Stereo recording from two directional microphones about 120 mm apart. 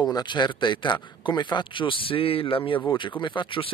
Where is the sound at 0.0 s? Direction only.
40° left (ahead or behind).